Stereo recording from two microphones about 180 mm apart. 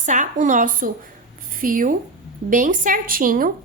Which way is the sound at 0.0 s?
45° right (ahead or behind).